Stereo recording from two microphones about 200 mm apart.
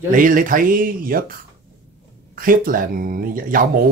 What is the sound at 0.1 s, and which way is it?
A man's voice, 40° right (ahead or behind).